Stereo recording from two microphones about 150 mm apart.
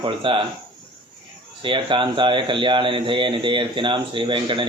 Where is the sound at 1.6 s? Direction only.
35° right (ahead or behind).